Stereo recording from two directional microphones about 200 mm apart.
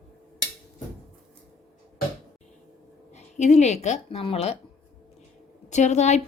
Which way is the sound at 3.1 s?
35° left (ahead or behind).